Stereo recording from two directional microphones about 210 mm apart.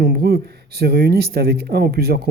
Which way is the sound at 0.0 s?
50° right (ahead or behind).